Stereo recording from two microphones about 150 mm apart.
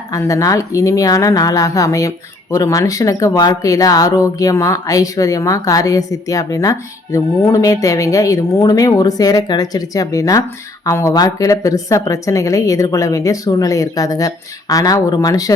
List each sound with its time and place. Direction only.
0.1 s speech: 20° left (ahead or behind)